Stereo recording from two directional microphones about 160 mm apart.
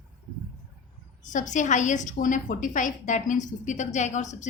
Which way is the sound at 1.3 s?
50° left (ahead or behind).